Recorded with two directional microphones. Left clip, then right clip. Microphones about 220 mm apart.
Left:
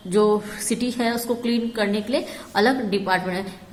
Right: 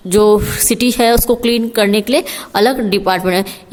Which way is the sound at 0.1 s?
50° right (ahead or behind).